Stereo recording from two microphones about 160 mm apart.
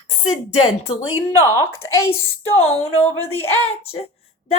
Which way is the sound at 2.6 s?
40° left (ahead or behind).